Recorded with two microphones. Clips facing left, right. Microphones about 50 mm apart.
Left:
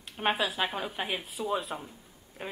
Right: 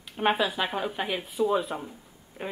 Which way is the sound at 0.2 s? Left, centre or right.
Centre.